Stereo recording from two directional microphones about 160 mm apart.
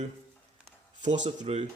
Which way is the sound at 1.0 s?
50° right (ahead or behind).